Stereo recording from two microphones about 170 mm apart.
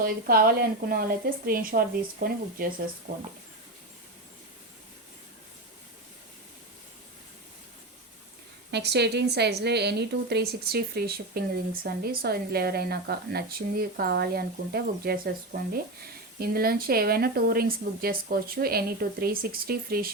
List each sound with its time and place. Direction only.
0.0 s speech: 60° right (ahead or behind)
8.7 s a woman's voice: 80° right; by 15.3 s 60° right (ahead or behind)
16.4 s speech: 60° right (ahead or behind)